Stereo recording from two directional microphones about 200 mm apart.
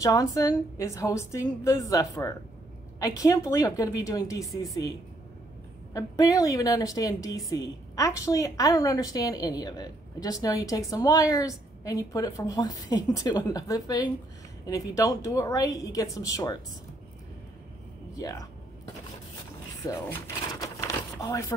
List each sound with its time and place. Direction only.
0.0 s a woman's voice: 15° left (ahead or behind)
5.9 s a woman's voice: 15° left (ahead or behind)
18.1 s speech: 15° left (ahead or behind)
19.8 s speech: 20° left (ahead or behind)